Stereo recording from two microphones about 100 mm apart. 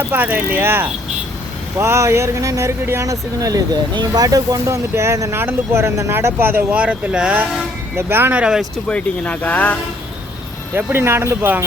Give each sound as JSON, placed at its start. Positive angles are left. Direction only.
{"t": 0.1, "sound": "speech", "side_deg": -15}
{"t": 7.9, "sound": "speech", "side_deg": -20}
{"t": 8.4, "sound": "speech", "side_deg": -5}
{"t": 8.9, "sound": "speech", "side_deg": 15}
{"t": 10.8, "sound": "speech", "side_deg": -20}